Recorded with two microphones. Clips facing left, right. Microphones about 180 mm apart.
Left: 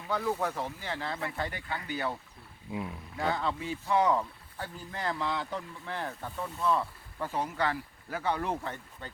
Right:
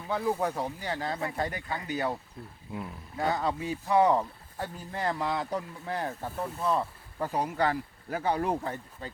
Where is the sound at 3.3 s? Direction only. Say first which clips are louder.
Right 3 dB; 40° right (ahead or behind).